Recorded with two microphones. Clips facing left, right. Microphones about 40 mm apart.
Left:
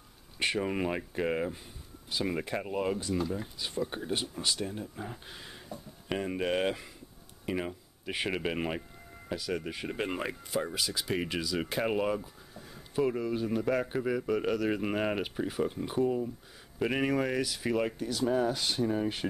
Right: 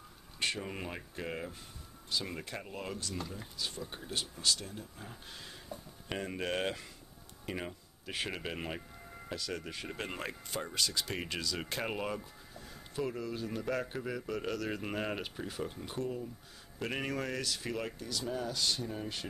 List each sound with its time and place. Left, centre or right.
0.4 s speech: centre
3.2 s speech: centre
3.5 s speech: centre